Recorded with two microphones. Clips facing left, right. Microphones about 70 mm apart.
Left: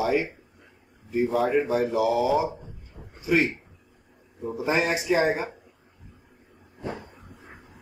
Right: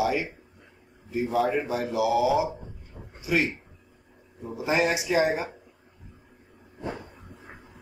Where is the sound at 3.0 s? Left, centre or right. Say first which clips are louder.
Right 2 dB; right.